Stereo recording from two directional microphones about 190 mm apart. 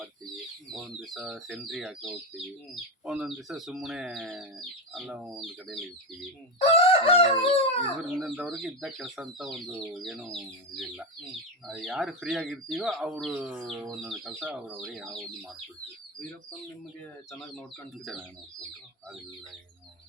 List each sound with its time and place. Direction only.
0.7 s speech: centre (ahead or behind)
6.6 s chicken: 30° left (ahead or behind)
8.2 s speech: centre (ahead or behind)
18.0 s speech: centre (ahead or behind)